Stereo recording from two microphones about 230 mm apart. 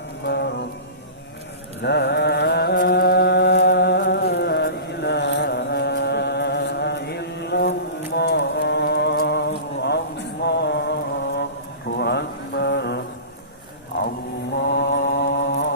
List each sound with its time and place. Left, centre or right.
0.3 s music: left
1.8 s mantra: left
11.9 s a sound: left
14.6 s mantra: left